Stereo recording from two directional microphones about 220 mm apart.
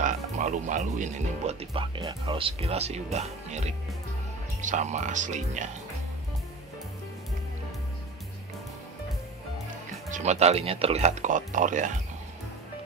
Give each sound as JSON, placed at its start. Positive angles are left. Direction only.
{"t": 0.0, "sound": "speech", "side_deg": -35}
{"t": 10.1, "sound": "speech", "side_deg": -30}